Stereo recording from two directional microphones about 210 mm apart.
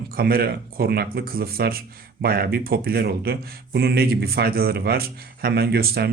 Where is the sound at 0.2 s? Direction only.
45° right (ahead or behind).